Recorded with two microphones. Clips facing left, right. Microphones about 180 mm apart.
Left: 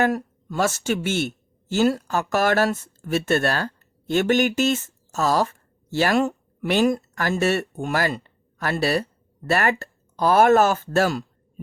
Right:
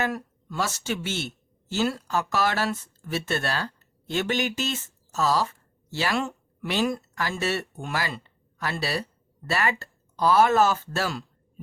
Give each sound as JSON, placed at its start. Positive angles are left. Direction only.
{"t": 0.0, "sound": "speech", "side_deg": 45}